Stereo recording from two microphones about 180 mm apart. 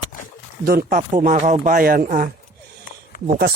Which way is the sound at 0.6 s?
55° right (ahead or behind).